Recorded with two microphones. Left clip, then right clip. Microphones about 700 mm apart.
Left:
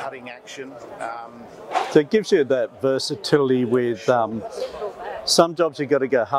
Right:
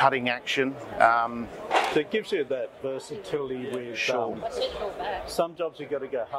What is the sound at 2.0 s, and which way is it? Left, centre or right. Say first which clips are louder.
Speech: left 9 dB; left.